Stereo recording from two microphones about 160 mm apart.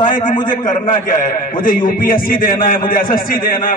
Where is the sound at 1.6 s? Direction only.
60° left (ahead or behind).